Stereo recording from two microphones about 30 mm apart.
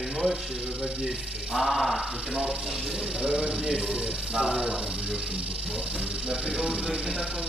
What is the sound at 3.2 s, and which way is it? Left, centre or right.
Speech, right.